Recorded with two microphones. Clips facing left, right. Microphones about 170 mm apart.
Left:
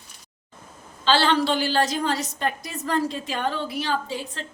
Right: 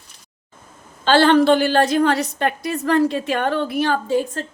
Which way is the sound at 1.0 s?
55° right (ahead or behind).